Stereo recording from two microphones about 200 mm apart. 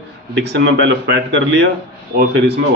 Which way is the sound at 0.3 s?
60° right (ahead or behind).